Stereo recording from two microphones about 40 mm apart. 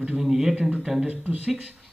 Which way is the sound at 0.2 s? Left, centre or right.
Centre.